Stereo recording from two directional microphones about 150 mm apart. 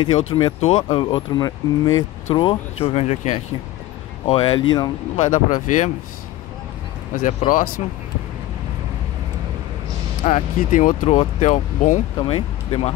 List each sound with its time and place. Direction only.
0.0 s speech: 35° left (ahead or behind)
5.3 s speech: 55° left (ahead or behind)
7.2 s speech: 65° left (ahead or behind)
10.2 s speech: 55° left (ahead or behind)
12.2 s speech: 35° left (ahead or behind)